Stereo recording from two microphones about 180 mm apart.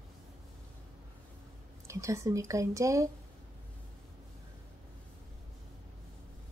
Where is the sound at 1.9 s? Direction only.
15° right (ahead or behind).